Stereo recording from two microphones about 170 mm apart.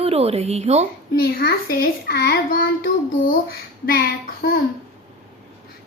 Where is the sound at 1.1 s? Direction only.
65° left (ahead or behind).